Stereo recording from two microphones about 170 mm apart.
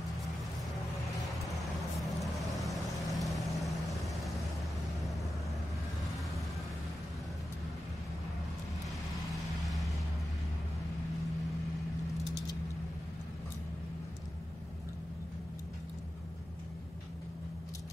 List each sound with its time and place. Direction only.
2.1 s vehicle: centre (ahead or behind)